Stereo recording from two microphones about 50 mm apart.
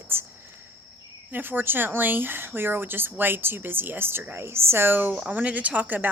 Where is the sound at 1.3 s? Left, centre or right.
Right.